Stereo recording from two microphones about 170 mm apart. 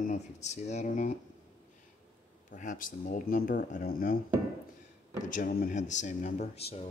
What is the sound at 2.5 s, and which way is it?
Speech, 50° left (ahead or behind).